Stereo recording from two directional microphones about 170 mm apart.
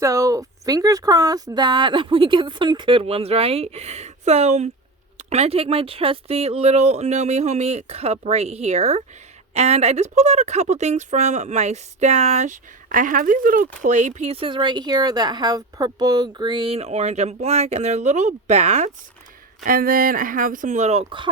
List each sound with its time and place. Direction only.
0.0 s speech: 20° right (ahead or behind); by 18.9 s 40° right (ahead or behind)
19.6 s speech: 55° right (ahead or behind); by 21.2 s 35° right (ahead or behind)